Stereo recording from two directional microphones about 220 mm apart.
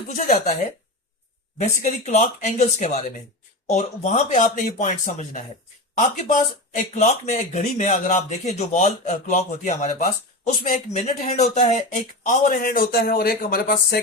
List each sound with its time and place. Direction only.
0.1 s speech: 35° left (ahead or behind)
1.5 s speech: 35° left (ahead or behind)